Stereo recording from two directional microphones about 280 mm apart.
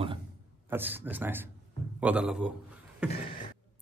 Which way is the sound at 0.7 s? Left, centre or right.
Centre.